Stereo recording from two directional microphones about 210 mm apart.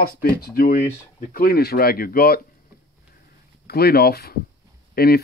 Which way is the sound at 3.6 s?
45° left (ahead or behind).